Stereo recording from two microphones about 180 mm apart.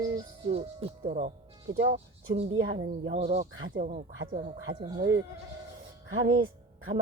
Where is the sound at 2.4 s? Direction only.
90° right.